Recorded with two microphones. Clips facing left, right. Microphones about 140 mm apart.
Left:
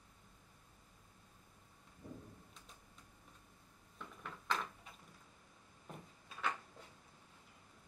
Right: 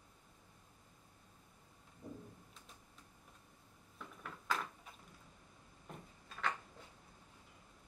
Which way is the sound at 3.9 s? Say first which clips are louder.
Even; 5° right (ahead or behind).